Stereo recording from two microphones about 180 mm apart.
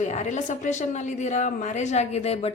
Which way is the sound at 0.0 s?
40° left (ahead or behind).